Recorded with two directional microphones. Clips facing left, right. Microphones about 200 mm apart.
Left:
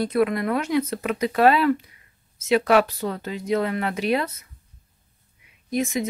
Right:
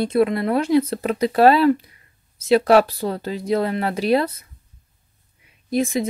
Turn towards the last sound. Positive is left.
turn(degrees=-30)  # may be behind; listen again after turning